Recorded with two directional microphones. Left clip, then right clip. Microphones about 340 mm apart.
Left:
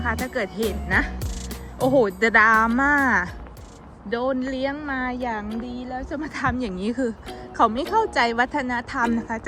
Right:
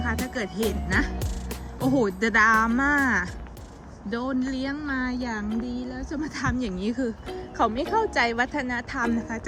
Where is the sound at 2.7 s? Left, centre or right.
Left.